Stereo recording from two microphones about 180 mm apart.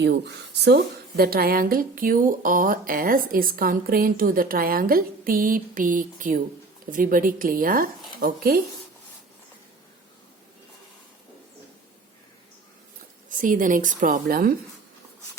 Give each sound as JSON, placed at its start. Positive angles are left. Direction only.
{"t": 0.0, "sound": "speech", "side_deg": -70}
{"t": 13.3, "sound": "speech", "side_deg": -45}